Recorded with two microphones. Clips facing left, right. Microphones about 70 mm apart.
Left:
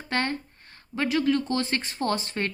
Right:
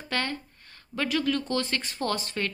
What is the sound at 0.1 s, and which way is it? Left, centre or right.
A woman's voice, left.